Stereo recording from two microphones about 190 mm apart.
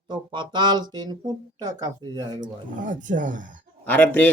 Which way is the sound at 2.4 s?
45° right (ahead or behind).